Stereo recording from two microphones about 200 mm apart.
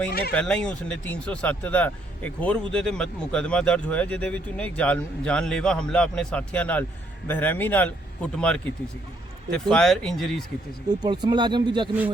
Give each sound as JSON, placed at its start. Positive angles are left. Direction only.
{"t": 0.1, "sound": "speech", "side_deg": 50}
{"t": 0.3, "sound": "a man's voice", "side_deg": 5}
{"t": 11.0, "sound": "speech", "side_deg": -20}